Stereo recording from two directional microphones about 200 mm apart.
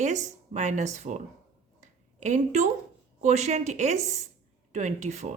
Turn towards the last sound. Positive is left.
turn(degrees=-35)  # may be behind; listen again after turning